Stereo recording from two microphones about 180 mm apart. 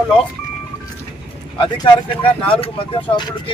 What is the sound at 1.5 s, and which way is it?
Speech, 30° left (ahead or behind).